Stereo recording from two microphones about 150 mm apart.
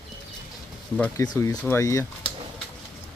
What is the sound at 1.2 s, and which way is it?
Speech, 20° left (ahead or behind).